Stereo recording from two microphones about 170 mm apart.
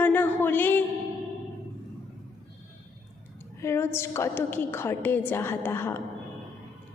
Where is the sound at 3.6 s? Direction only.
15° left (ahead or behind).